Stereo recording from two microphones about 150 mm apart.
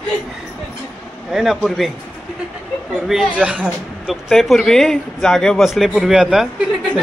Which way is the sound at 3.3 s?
5° right (ahead or behind).